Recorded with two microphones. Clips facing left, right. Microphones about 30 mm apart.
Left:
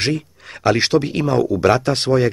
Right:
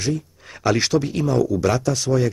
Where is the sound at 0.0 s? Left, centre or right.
Left.